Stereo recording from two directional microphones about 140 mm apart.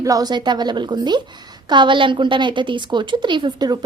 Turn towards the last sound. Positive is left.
turn(degrees=-30)  # may be behind; listen again after turning